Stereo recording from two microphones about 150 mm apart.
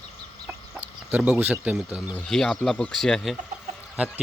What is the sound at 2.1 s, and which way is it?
Speech, 5° left (ahead or behind).